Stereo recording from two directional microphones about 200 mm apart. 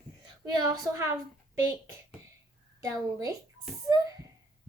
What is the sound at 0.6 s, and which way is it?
Speech, 15° right (ahead or behind).